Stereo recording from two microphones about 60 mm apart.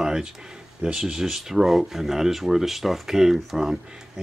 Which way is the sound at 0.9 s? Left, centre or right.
Centre.